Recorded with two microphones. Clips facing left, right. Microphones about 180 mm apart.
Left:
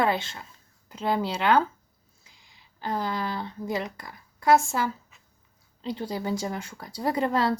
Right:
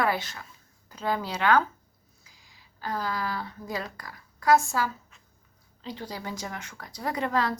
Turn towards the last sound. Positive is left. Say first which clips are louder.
# left 3 dB
turn(degrees=30)  # may be behind; listen again after turning